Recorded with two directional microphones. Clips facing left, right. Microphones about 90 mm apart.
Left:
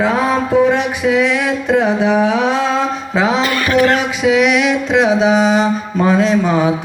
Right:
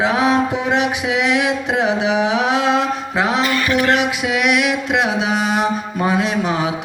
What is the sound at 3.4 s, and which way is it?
Speech, 45° left (ahead or behind).